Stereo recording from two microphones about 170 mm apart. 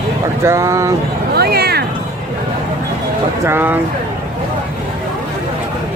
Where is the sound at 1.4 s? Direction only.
65° right (ahead or behind).